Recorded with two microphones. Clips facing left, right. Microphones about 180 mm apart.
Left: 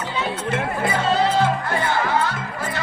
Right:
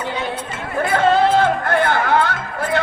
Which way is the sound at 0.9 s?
55° right (ahead or behind).